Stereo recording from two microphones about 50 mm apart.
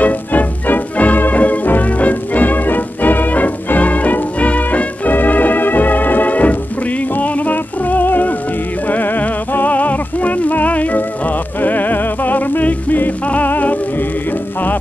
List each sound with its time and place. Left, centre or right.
0.0 s music: left